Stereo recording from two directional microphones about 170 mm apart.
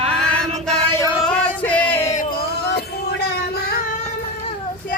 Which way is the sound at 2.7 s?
80° left.